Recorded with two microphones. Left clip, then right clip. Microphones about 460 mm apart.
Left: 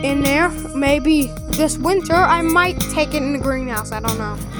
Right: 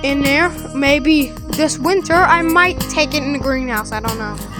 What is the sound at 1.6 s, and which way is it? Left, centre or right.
Music, left.